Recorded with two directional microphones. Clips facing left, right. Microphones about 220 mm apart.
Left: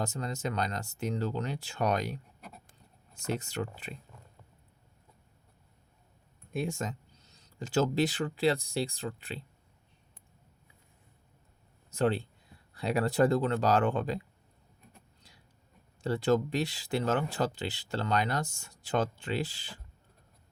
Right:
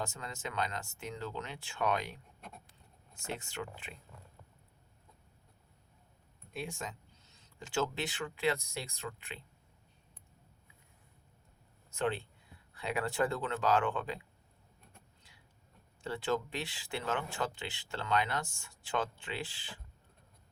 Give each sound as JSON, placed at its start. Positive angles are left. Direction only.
{"t": 0.0, "sound": "speech", "side_deg": 40}
{"t": 3.2, "sound": "speech", "side_deg": 40}
{"t": 6.5, "sound": "speech", "side_deg": 45}
{"t": 11.9, "sound": "speech", "side_deg": 40}
{"t": 16.0, "sound": "speech", "side_deg": 40}